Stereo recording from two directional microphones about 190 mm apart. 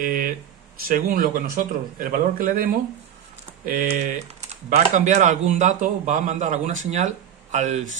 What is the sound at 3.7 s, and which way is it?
Speech, 40° right (ahead or behind).